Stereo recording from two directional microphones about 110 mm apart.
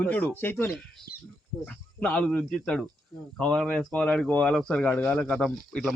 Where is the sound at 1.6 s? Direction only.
10° left (ahead or behind).